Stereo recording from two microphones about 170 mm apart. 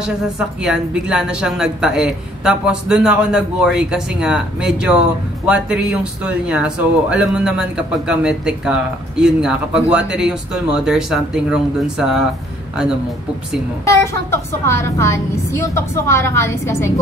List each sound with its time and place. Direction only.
0.0 s speech: 5° right (ahead or behind)
13.8 s a woman's voice: 15° left (ahead or behind)